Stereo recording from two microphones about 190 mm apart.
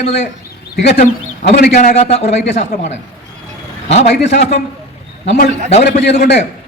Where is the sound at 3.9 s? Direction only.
35° left (ahead or behind).